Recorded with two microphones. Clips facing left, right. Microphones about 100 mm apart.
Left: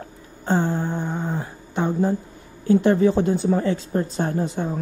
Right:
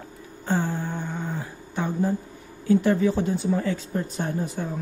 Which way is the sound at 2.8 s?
30° left (ahead or behind).